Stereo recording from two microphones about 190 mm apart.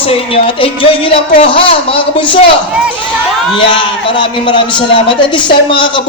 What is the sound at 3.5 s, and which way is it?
Speech, 25° left (ahead or behind).